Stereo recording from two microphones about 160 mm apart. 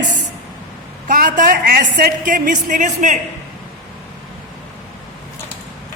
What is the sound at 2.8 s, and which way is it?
Speech, 50° right (ahead or behind).